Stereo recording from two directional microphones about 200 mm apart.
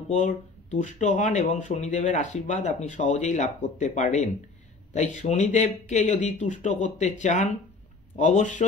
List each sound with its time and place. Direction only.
0.1 s speech: 40° left (ahead or behind)